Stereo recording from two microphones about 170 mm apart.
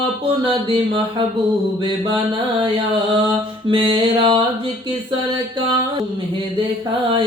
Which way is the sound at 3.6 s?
30° right (ahead or behind).